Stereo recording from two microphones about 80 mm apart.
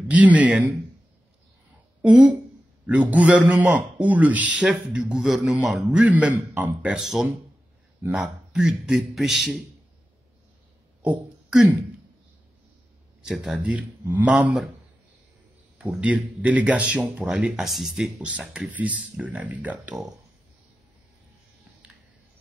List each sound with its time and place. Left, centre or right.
0.1 s speech: centre
2.0 s a man's voice: centre
5.9 s speech: centre
6.9 s a man's voice: centre
13.2 s speech: centre
13.6 s speech: centre
15.8 s speech: centre
18.2 s speech: centre